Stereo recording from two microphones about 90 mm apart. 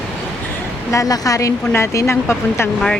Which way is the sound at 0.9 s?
40° left (ahead or behind).